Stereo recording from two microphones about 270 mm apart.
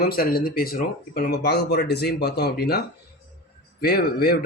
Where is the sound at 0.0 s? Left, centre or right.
Left.